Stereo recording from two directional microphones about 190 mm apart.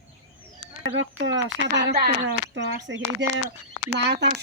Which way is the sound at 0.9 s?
70° right (ahead or behind).